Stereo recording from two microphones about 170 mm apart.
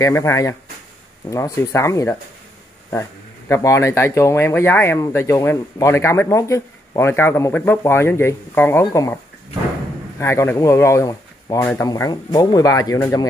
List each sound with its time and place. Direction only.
0.0 s speech: 15° left (ahead or behind)
11.9 s speech: 20° left (ahead or behind)